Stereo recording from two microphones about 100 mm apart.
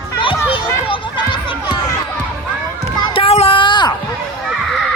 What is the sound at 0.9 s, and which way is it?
Music, 55° left (ahead or behind).